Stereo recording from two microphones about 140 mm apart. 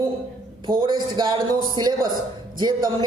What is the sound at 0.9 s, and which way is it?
A man's voice, 35° right (ahead or behind).